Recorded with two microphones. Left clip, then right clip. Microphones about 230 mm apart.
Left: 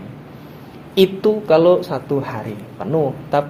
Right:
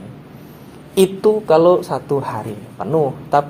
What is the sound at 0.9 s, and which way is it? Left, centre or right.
Speech, right.